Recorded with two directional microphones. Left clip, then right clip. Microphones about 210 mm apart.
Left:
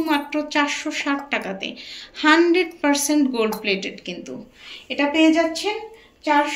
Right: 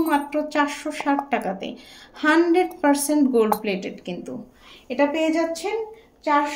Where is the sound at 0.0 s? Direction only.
45° right (ahead or behind).